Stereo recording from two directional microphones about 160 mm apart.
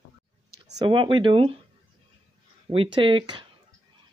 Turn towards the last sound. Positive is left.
turn(degrees=-30)  # may be behind; listen again after turning